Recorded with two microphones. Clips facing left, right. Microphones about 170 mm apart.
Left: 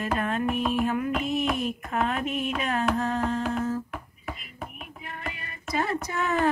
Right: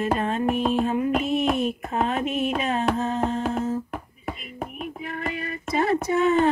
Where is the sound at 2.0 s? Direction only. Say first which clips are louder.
Right 4 dB; 25° right (ahead or behind).